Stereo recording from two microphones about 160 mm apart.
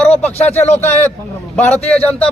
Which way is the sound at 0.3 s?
40° left (ahead or behind).